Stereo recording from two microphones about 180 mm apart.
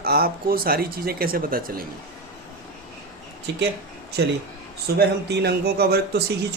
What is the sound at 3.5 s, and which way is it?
Speech, 70° right (ahead or behind).